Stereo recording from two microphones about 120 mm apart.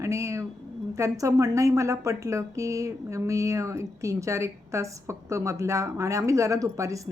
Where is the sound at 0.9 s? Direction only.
25° right (ahead or behind).